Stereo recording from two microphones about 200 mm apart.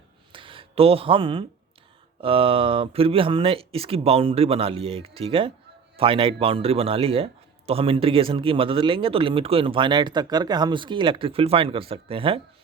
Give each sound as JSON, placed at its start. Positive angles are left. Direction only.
{"t": 0.3, "sound": "speech", "side_deg": -25}